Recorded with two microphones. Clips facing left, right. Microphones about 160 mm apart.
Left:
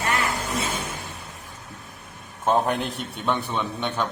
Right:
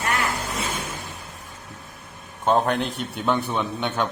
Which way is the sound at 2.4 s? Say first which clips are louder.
Right 1 dB; 5° left (ahead or behind).